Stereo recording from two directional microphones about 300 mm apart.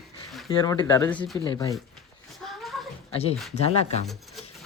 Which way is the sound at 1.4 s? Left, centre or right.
Centre.